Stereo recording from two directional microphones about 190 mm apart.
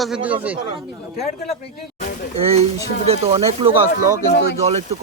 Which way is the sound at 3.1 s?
30° right (ahead or behind).